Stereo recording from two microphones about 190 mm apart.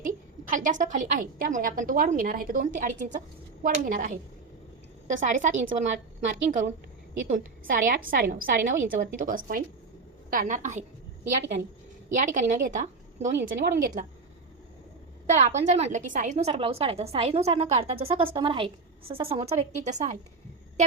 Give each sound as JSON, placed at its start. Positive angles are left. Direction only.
{"t": 0.0, "sound": "a woman's voice", "side_deg": -45}
{"t": 7.7, "sound": "a woman's voice", "side_deg": -45}
{"t": 12.1, "sound": "a woman's voice", "side_deg": -40}
{"t": 15.3, "sound": "a woman's voice", "side_deg": -35}